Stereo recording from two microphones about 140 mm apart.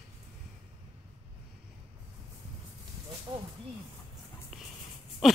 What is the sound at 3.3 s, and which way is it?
Snake, 30° right (ahead or behind).